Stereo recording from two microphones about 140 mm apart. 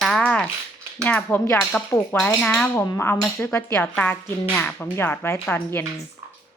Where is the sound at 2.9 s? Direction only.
20° left (ahead or behind).